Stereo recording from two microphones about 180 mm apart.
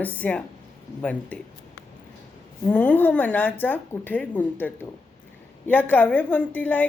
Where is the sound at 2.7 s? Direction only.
10° left (ahead or behind).